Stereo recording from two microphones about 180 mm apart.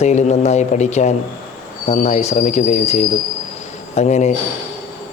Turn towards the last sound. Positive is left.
turn(degrees=40)  # may be behind; listen again after turning